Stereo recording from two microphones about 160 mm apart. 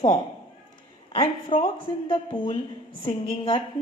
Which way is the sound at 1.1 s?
35° left (ahead or behind).